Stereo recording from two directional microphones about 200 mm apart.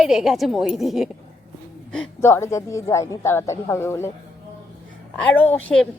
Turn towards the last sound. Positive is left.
turn(degrees=5)  # may be behind; listen again after turning